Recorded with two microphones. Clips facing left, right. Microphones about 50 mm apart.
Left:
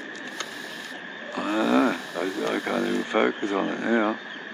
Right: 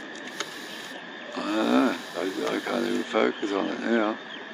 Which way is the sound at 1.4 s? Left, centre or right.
Left.